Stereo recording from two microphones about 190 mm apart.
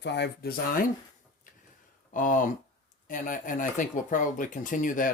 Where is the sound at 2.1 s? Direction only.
45° left (ahead or behind).